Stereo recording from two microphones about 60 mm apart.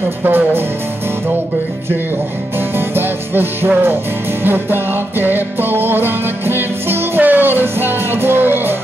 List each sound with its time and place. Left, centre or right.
0.2 s music: right
2.8 s music: right